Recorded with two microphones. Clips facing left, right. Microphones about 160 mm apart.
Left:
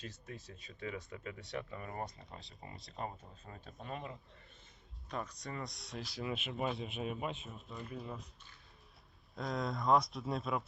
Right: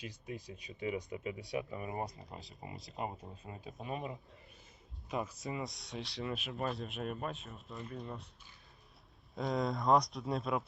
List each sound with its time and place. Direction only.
0.0 s speech: 15° right (ahead or behind)
2.0 s speech: centre (ahead or behind)
3.1 s speech: 25° right (ahead or behind)
3.6 s speech: centre (ahead or behind)
3.9 s speech: 20° right (ahead or behind)
5.0 s speech: 5° right (ahead or behind)
9.3 s speech: centre (ahead or behind)